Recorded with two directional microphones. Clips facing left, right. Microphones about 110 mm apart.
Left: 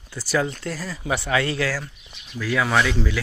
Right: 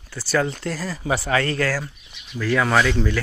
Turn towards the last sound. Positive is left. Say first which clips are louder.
# right 2 dB
turn(degrees=5)  # may be behind; listen again after turning